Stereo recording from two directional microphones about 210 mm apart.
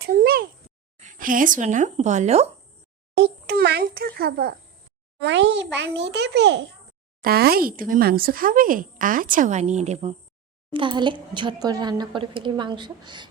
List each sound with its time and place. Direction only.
0.0 s a sound: 45° right (ahead or behind)
0.9 s speech: 40° right (ahead or behind)
3.2 s a child's voice: 50° right (ahead or behind)
5.2 s a child's voice: 55° right (ahead or behind); by 13.2 s 20° right (ahead or behind)